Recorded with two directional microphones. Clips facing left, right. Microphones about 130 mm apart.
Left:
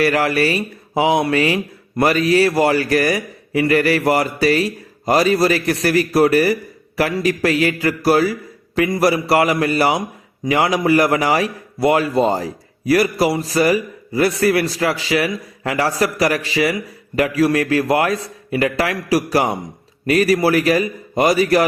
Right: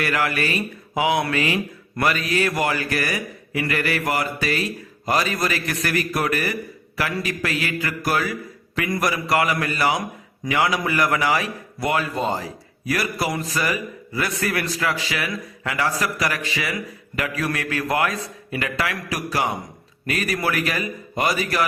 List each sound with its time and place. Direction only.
0.0 s a man's voice: 35° left (ahead or behind)